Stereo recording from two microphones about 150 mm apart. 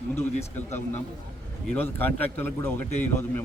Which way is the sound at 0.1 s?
15° left (ahead or behind).